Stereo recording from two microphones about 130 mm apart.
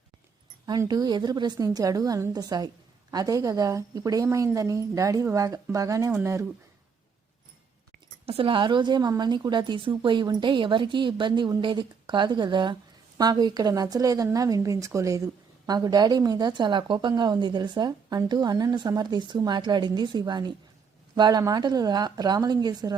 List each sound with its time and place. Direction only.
0.6 s a woman's voice: 30° right (ahead or behind)
8.3 s a woman's voice: 45° right (ahead or behind)